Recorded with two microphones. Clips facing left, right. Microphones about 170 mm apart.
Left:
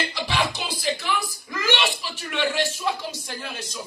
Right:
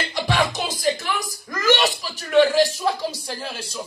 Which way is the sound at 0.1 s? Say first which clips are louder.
Right 4 dB; 45° right (ahead or behind).